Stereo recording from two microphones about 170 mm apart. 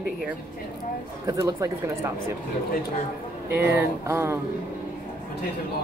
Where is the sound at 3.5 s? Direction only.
10° right (ahead or behind).